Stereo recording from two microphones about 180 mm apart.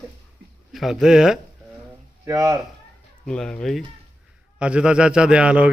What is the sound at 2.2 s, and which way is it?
Speech, 15° right (ahead or behind).